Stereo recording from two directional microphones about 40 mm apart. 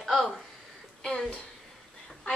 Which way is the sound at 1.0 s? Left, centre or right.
Centre.